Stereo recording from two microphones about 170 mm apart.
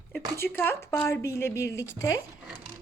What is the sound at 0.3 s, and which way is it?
Speech, 15° left (ahead or behind).